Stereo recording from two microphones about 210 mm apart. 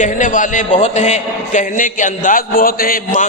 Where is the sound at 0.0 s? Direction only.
35° left (ahead or behind).